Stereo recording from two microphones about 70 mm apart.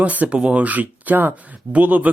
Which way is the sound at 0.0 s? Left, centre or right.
Right.